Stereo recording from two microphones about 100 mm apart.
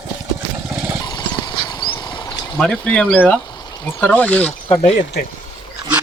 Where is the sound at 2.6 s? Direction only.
10° left (ahead or behind).